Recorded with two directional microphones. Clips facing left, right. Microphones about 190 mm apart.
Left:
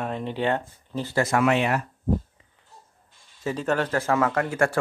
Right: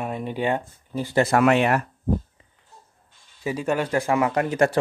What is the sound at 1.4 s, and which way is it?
Speech, 55° right (ahead or behind).